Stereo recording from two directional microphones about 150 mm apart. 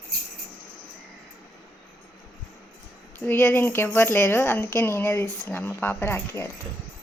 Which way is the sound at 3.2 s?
15° left (ahead or behind).